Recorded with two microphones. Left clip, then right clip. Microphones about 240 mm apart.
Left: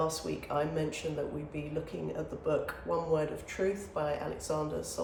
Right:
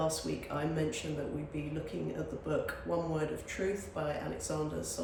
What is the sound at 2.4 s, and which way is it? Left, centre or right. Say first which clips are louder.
Speech: left 4 dB; centre.